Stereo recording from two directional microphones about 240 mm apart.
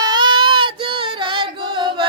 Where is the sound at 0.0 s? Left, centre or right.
Centre.